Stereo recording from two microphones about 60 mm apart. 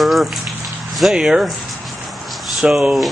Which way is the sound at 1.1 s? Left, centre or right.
Centre.